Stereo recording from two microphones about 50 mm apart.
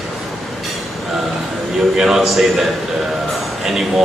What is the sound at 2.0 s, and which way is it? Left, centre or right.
Speech, centre.